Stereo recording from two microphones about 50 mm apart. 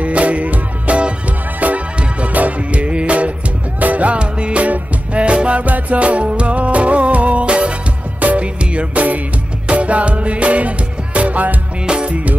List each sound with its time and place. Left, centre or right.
0.0 s music: right
11.8 s music: centre